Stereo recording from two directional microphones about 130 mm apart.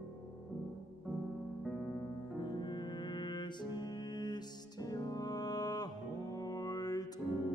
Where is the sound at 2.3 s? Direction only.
35° left (ahead or behind).